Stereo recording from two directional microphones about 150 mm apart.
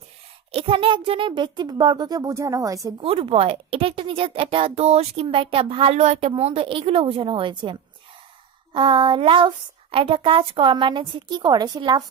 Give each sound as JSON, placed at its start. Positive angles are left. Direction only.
{"t": 0.5, "sound": "a child's voice", "side_deg": -35}
{"t": 3.0, "sound": "speech", "side_deg": -35}